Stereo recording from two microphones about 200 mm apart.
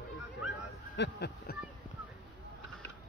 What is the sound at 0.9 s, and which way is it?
Speech, 60° left (ahead or behind).